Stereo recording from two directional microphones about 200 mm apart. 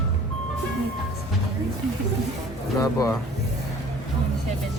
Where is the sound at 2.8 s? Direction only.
15° left (ahead or behind).